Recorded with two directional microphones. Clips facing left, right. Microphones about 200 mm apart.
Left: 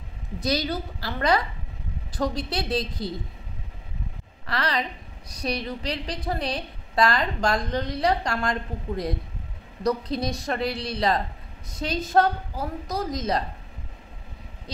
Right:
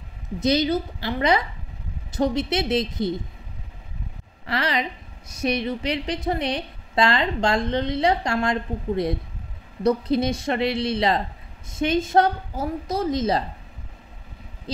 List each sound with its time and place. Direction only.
0.4 s a woman's voice: 20° right (ahead or behind)
4.5 s a woman's voice: 25° right (ahead or behind)
10.3 s a woman's voice: 25° right (ahead or behind)